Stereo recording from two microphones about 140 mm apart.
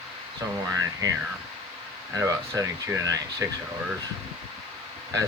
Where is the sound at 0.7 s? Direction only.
20° right (ahead or behind).